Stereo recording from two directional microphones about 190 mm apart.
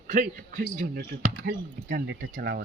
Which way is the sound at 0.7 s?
55° right (ahead or behind).